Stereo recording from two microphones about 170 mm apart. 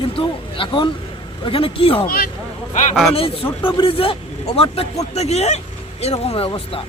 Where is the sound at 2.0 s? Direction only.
60° left (ahead or behind).